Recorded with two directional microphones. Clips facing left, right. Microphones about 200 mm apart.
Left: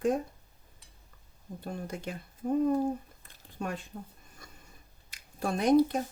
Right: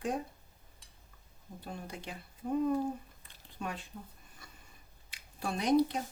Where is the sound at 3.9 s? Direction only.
45° left (ahead or behind).